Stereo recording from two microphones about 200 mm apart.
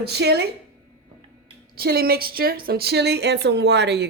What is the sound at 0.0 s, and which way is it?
Speech, 55° right (ahead or behind).